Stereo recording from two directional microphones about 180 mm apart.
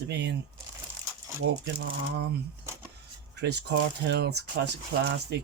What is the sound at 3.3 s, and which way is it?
Speech, 70° right (ahead or behind).